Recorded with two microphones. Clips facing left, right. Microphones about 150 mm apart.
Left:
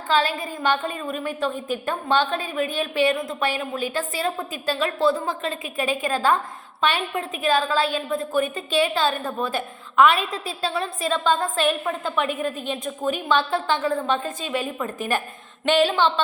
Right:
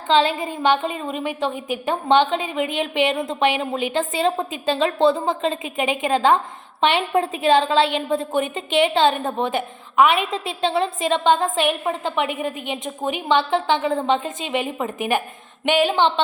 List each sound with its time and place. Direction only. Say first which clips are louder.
0.1 s a woman's voice: right 4 dB; 20° right (ahead or behind)